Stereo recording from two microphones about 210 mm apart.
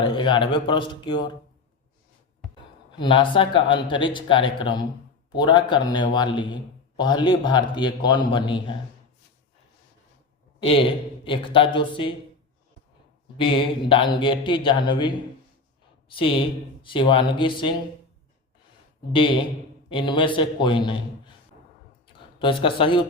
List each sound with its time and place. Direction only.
0.1 s a man's voice: 20° left (ahead or behind)
3.0 s a man's voice: 25° left (ahead or behind)
10.6 s a woman's voice: 25° left (ahead or behind)
13.3 s a man's voice: 25° left (ahead or behind)
19.1 s a man's voice: 25° left (ahead or behind)
22.0 s a sound: 25° left (ahead or behind)